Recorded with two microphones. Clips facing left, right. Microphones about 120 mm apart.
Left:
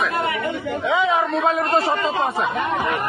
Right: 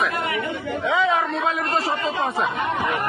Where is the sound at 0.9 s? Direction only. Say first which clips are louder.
Left 1 dB; 15° left (ahead or behind).